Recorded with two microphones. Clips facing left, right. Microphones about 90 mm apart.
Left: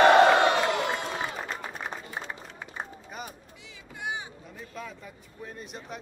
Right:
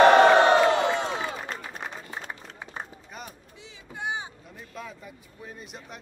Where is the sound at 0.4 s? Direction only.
30° right (ahead or behind).